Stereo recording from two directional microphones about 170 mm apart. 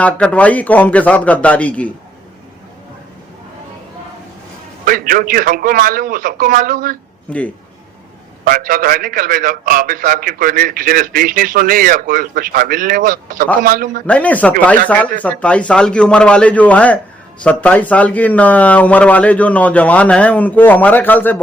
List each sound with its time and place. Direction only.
0.0 s speech: 10° left (ahead or behind)
4.9 s a man's voice: 55° right (ahead or behind)
8.4 s a man's voice: 55° right (ahead or behind)
14.1 s speech: 10° left (ahead or behind)